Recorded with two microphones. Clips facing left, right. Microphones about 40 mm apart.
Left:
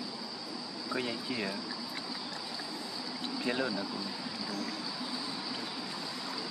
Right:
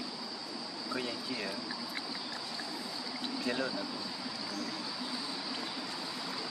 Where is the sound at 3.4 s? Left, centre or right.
Left.